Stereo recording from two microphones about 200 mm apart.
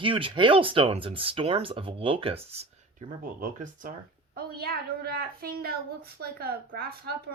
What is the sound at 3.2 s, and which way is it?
Speech, 40° right (ahead or behind).